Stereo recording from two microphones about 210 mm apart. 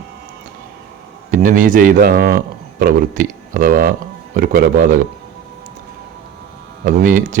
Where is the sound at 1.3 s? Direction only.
40° right (ahead or behind).